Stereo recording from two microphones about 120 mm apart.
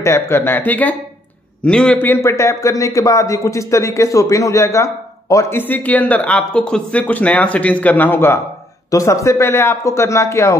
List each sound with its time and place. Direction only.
0.0 s a man's voice: 20° left (ahead or behind)